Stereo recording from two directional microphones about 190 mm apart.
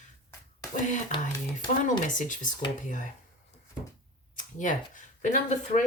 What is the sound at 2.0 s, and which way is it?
Speech, 40° left (ahead or behind).